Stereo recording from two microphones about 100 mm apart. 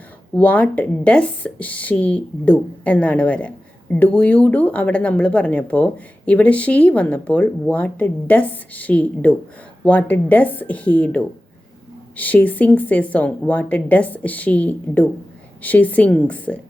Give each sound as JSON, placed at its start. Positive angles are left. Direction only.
{"t": 0.3, "sound": "speech", "side_deg": 15}